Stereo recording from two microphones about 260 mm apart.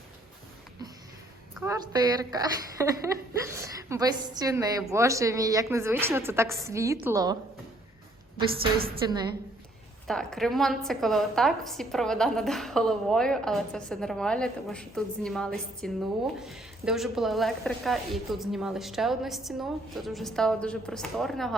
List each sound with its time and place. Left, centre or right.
1.5 s a woman's voice: centre
8.4 s a woman's voice: right
9.0 s a woman's voice: centre
10.1 s a woman's voice: centre